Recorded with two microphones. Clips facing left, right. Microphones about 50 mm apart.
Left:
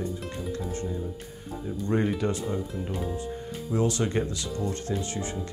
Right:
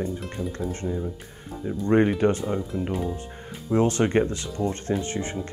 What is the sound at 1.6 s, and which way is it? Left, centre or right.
Speech, right.